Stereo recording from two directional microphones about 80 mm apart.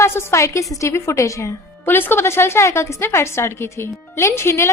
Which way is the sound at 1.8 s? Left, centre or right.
Left.